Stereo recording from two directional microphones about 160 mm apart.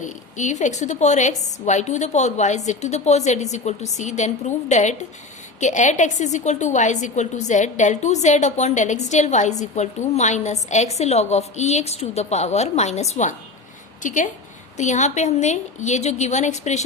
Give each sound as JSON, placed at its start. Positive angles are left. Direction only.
{"t": 0.0, "sound": "a woman's voice", "side_deg": 50}